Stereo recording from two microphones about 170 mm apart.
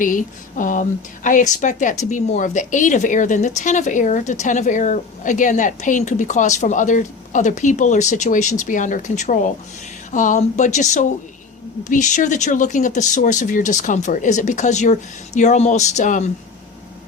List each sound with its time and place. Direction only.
0.0 s a woman's voice: 50° left (ahead or behind)